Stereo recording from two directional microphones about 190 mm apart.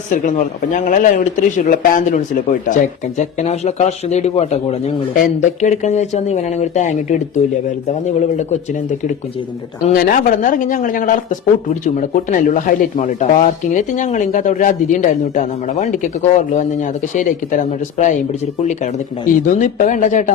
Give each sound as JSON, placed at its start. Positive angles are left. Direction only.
{"t": 0.1, "sound": "speech", "side_deg": 45}
{"t": 9.9, "sound": "speech", "side_deg": 50}
{"t": 17.2, "sound": "speech", "side_deg": 40}
{"t": 19.5, "sound": "speech", "side_deg": 40}